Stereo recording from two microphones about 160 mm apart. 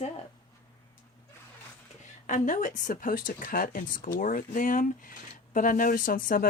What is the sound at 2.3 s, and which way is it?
Speech, 55° left (ahead or behind).